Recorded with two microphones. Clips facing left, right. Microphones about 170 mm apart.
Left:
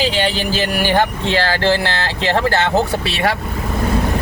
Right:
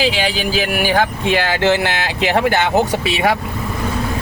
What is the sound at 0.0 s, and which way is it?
Speech, 10° right (ahead or behind).